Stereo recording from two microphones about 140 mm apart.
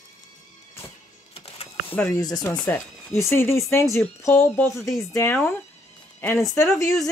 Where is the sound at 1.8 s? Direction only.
10° left (ahead or behind).